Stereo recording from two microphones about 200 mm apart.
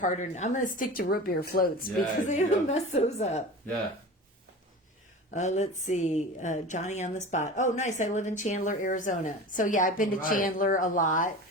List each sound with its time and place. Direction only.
0.0 s a woman's voice: 40° left (ahead or behind)
5.3 s a woman's voice: 35° left (ahead or behind)